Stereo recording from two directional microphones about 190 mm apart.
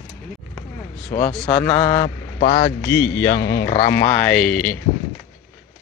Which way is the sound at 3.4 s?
60° left (ahead or behind).